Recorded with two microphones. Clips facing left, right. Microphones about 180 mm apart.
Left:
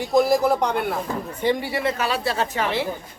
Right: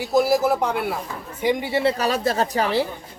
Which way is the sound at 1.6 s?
30° right (ahead or behind).